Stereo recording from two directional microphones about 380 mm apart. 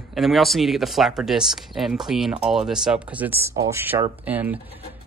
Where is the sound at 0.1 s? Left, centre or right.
Centre.